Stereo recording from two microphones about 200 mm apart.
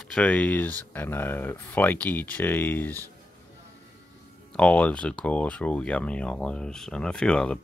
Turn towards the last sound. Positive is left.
turn(degrees=5)  # may be behind; listen again after turning